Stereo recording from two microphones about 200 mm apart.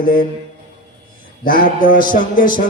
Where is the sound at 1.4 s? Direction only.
45° left (ahead or behind).